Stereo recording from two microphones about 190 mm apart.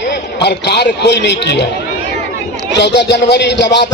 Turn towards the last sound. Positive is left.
turn(degrees=65)  # may be behind; listen again after turning